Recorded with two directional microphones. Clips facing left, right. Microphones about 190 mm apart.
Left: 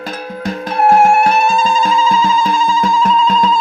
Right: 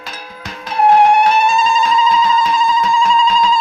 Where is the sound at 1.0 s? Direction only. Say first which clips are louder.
Even; 5° left (ahead or behind).